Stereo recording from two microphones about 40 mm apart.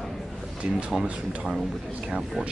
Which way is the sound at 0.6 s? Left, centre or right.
Right.